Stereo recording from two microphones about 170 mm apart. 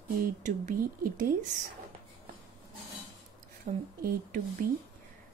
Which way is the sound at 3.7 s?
45° right (ahead or behind).